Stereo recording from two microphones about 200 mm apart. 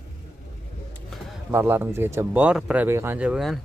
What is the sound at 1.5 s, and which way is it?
Speech, 10° right (ahead or behind).